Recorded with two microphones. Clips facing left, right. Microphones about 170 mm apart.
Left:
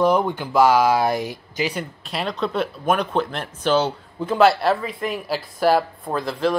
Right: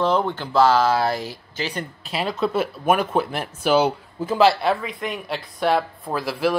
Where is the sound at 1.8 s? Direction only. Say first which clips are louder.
Even; centre (ahead or behind).